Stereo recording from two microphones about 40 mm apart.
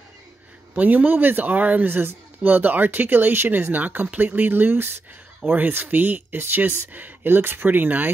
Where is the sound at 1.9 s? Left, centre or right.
Right.